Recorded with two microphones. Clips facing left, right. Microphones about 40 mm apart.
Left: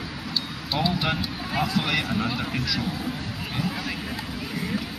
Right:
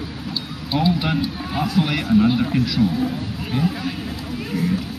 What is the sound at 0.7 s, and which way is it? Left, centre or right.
Speech, centre.